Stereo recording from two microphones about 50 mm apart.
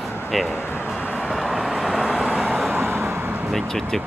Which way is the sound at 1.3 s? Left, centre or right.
Centre.